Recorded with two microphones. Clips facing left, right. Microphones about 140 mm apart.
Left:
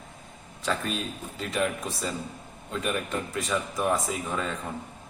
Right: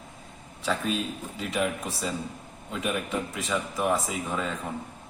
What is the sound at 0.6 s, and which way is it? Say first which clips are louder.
A man's voice: right 2 dB; 5° right (ahead or behind).